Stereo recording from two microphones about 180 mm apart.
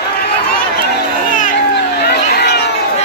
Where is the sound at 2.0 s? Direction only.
65° left (ahead or behind).